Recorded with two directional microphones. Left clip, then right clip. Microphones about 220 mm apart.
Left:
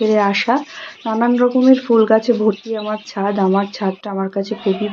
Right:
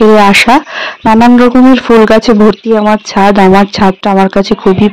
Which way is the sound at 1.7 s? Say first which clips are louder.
Right 8 dB; 50° right (ahead or behind).